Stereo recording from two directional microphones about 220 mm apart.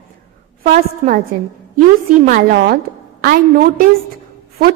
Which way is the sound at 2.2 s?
40° right (ahead or behind).